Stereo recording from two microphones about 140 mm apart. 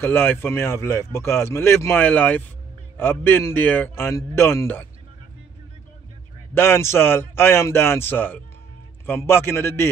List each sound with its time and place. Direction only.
0.0 s speech: 15° left (ahead or behind)
6.5 s speech: 15° left (ahead or behind)